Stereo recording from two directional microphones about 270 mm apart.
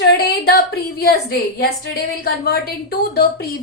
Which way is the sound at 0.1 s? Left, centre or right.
Left.